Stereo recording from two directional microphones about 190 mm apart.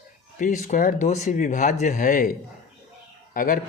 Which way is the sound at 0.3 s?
40° left (ahead or behind).